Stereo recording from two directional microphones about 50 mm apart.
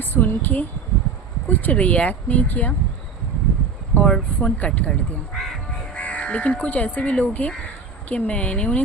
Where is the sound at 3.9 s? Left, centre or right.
Left.